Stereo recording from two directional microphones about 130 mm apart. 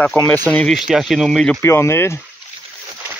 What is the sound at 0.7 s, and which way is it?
Speech, 5° right (ahead or behind).